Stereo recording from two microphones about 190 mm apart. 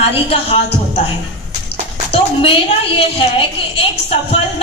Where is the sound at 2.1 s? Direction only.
30° left (ahead or behind).